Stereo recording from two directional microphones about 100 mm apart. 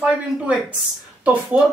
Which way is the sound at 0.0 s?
10° right (ahead or behind).